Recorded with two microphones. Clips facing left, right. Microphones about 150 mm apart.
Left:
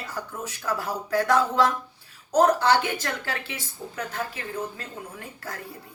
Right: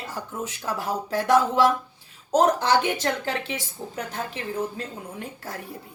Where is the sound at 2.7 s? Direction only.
20° right (ahead or behind).